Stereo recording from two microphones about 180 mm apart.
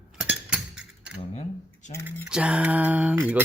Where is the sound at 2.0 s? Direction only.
10° right (ahead or behind).